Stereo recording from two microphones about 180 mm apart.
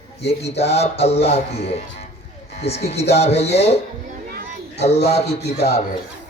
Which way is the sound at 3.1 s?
35° left (ahead or behind).